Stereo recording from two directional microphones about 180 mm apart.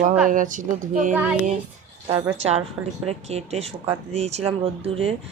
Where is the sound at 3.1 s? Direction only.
35° right (ahead or behind).